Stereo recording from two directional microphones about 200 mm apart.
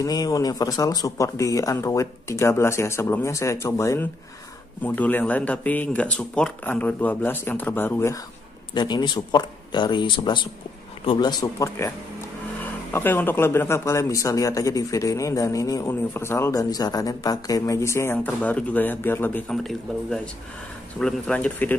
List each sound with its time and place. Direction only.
0.0 s speech: 20° left (ahead or behind)
12.9 s speech: 10° left (ahead or behind)